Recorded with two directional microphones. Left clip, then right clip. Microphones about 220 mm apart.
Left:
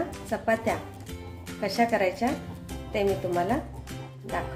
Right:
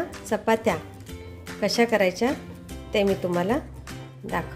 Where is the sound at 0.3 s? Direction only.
50° right (ahead or behind).